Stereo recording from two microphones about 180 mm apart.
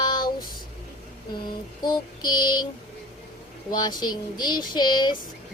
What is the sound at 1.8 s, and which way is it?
Child singing, 25° left (ahead or behind).